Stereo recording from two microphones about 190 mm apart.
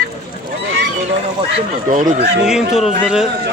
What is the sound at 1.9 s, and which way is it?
Speech, 40° right (ahead or behind).